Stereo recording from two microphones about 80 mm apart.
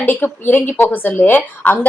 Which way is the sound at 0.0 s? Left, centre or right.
Left.